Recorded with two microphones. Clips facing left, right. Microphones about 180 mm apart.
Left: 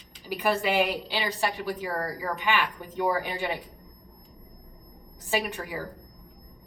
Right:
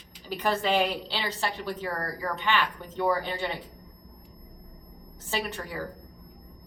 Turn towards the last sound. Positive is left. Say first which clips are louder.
# left 3 dB
turn(degrees=10)  # may be behind; listen again after turning